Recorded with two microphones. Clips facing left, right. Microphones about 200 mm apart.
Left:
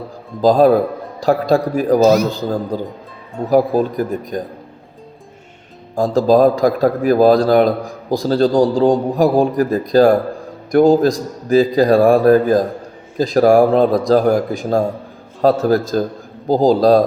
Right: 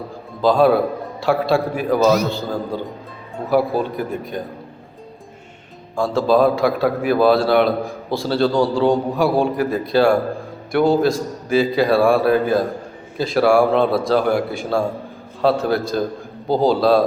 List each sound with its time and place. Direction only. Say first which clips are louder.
0.4 s speech: left 3 dB; 40° left (ahead or behind)
6.0 s speech: left 4 dB; 40° left (ahead or behind)